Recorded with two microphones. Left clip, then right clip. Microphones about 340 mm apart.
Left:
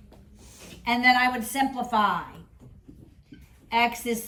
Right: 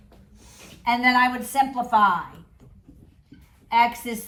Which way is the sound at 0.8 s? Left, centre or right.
Centre.